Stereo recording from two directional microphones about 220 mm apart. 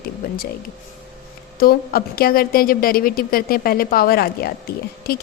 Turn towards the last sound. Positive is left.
turn(degrees=45)  # may be behind; listen again after turning